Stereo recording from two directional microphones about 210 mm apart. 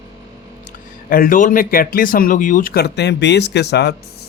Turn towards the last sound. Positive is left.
turn(degrees=50)  # may be behind; listen again after turning